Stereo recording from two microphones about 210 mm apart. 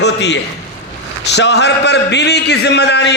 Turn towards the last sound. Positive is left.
turn(degrees=55)  # may be behind; listen again after turning